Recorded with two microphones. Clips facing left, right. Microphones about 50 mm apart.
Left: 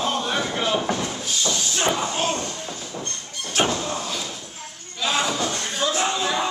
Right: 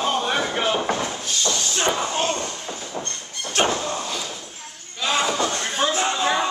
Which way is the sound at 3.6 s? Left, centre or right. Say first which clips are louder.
Right 1 dB; centre.